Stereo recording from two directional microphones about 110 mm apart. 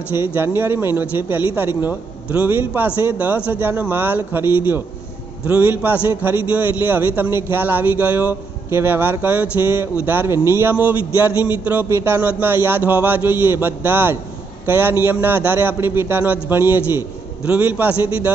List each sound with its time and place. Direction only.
0.1 s a man's voice: 20° right (ahead or behind)